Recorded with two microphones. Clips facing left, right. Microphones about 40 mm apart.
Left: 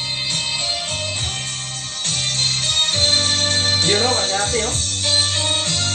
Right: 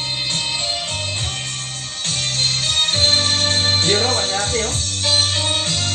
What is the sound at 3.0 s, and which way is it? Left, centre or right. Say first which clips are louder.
Music: right 1 dB; right.